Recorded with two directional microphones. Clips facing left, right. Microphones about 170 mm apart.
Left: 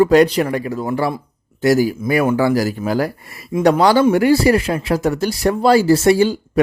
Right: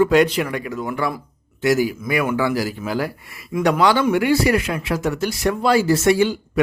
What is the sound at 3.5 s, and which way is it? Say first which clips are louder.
A man's voice: left 4 dB; 30° left (ahead or behind).